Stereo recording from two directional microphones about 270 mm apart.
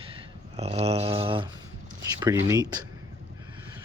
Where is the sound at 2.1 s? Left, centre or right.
Centre.